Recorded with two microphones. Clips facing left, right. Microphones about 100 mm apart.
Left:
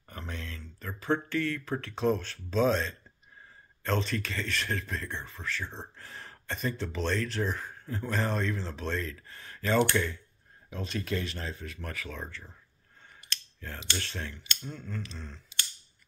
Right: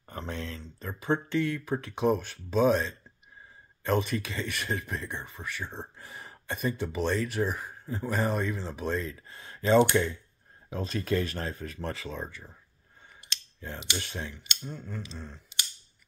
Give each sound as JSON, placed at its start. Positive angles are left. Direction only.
{"t": 0.0, "sound": "speech", "side_deg": -30}
{"t": 10.7, "sound": "speech", "side_deg": -35}
{"t": 12.2, "sound": "speech", "side_deg": -15}